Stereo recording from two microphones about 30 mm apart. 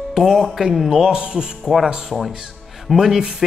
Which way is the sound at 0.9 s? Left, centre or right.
Centre.